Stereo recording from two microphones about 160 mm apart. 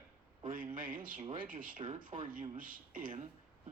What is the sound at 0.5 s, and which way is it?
Speech, 60° right (ahead or behind).